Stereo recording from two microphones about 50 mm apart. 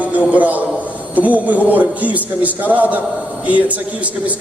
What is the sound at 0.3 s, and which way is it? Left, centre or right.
A man's voice, right.